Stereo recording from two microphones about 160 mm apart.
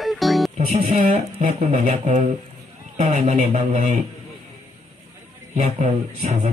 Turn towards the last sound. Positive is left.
turn(degrees=-55)  # may be behind; listen again after turning